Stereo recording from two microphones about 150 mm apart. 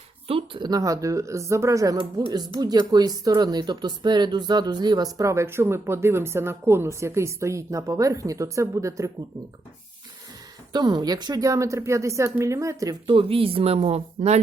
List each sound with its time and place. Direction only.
0.3 s speech: 35° right (ahead or behind); by 9.1 s 20° right (ahead or behind)
10.7 s speech: 30° right (ahead or behind)
13.1 s a woman's voice: 35° right (ahead or behind)